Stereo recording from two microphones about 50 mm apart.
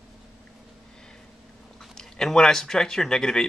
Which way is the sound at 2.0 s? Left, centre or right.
Centre.